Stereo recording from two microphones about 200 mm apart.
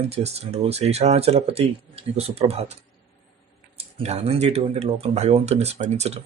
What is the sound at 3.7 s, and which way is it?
Speech, 30° right (ahead or behind).